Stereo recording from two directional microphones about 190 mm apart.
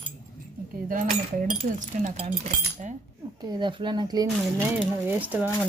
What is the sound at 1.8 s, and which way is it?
Speech, 35° right (ahead or behind).